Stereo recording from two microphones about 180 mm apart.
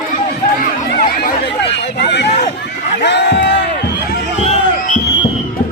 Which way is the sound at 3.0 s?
75° left (ahead or behind).